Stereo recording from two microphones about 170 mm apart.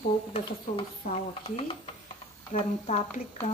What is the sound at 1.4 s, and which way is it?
A woman's voice, 35° left (ahead or behind).